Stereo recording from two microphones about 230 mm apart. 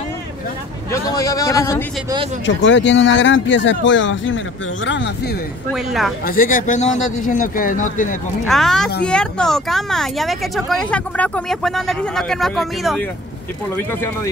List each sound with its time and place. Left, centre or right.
1.1 s a man's voice: centre
2.4 s speech: left
5.8 s speech: centre
6.2 s speech: left
8.5 s speech: centre
13.7 s a man's voice: centre